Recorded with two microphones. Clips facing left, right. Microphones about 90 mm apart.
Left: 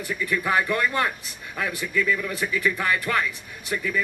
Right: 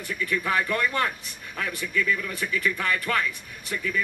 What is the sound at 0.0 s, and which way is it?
Speech, 15° left (ahead or behind).